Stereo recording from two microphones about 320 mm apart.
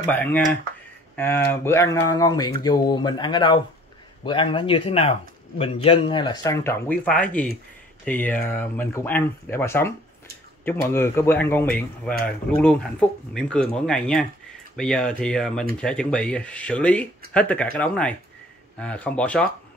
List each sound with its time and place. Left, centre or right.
0.1 s speech: centre